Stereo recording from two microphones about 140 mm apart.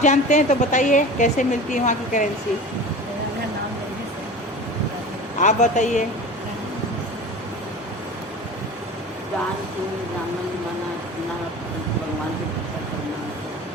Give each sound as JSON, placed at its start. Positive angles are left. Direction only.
{"t": 0.0, "sound": "a woman's voice", "side_deg": 60}
{"t": 5.4, "sound": "a woman's voice", "side_deg": 60}